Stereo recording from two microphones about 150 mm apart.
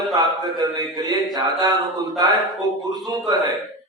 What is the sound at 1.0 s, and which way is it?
Mantra, 25° right (ahead or behind).